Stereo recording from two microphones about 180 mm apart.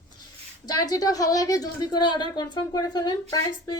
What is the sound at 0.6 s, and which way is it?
A woman's voice, 20° left (ahead or behind).